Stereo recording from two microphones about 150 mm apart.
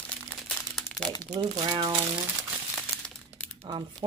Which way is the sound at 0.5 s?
5° left (ahead or behind).